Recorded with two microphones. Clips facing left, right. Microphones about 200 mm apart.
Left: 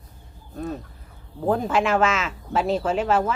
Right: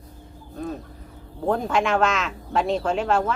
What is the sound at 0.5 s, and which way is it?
Vehicle, centre (ahead or behind).